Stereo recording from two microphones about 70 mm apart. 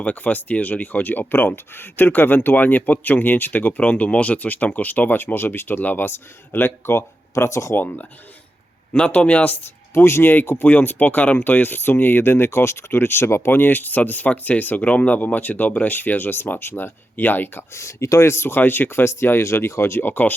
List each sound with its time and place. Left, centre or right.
0.0 s speech: left
7.8 s speech: left
8.9 s speech: centre
9.9 s speech: left
17.7 s speech: left